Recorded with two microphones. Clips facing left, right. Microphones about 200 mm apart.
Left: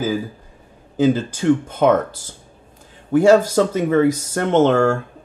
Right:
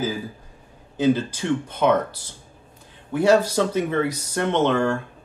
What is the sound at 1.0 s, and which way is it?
Speech, 45° left (ahead or behind).